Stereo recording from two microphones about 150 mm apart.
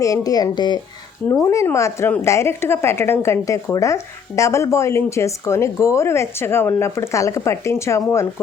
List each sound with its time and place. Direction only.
0.0 s a woman's voice: 25° left (ahead or behind)